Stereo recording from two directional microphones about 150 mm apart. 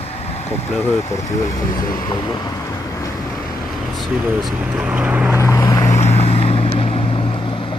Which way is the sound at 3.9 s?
5° right (ahead or behind).